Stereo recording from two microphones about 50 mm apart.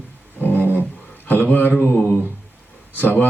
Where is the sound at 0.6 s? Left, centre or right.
Right.